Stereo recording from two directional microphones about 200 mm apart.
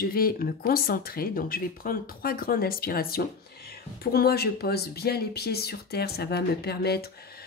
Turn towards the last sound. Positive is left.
turn(degrees=55)  # may be behind; listen again after turning